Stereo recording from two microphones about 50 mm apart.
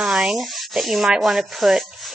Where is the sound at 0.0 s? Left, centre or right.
Centre.